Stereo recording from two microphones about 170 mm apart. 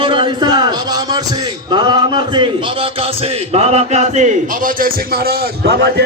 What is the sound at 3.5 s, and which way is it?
A man's voice, 40° right (ahead or behind).